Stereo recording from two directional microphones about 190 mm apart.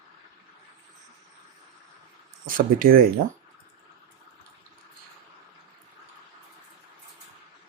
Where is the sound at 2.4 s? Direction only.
45° right (ahead or behind).